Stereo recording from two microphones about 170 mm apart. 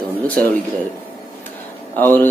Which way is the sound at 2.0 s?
10° left (ahead or behind).